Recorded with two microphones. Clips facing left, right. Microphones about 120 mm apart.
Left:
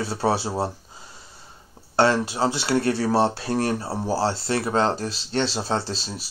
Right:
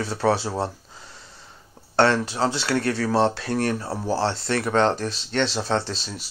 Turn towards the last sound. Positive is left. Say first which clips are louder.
# right 1 dB
turn(degrees=35)  # may be behind; listen again after turning